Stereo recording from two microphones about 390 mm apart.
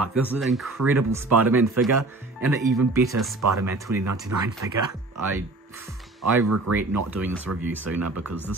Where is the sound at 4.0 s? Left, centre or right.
Right.